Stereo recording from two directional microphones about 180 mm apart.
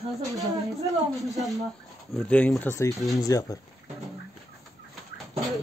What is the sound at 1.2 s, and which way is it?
Speech, centre (ahead or behind).